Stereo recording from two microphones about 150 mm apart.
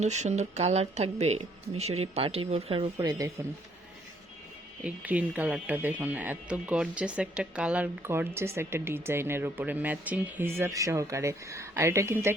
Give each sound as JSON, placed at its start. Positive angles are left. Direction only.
{"t": 0.0, "sound": "speech", "side_deg": -50}
{"t": 3.0, "sound": "speech", "side_deg": -25}
{"t": 4.8, "sound": "speech", "side_deg": -10}